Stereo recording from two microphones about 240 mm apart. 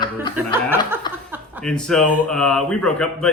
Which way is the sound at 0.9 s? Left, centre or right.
Centre.